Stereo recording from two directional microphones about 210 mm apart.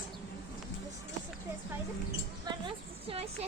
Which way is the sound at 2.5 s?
20° right (ahead or behind).